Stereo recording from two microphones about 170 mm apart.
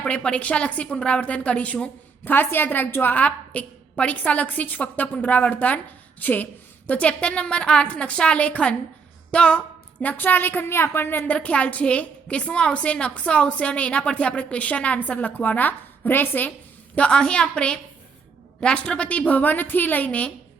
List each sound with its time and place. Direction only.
0.0 s a woman's voice: 5° left (ahead or behind)